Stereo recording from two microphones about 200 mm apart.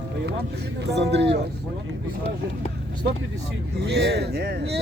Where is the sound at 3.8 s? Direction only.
55° right (ahead or behind).